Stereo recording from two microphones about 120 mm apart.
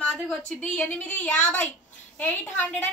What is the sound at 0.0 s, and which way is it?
A woman's voice, 10° left (ahead or behind).